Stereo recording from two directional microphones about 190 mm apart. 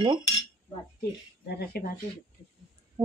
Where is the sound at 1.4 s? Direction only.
60° left (ahead or behind).